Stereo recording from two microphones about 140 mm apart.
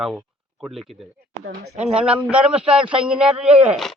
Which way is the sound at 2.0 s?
10° right (ahead or behind).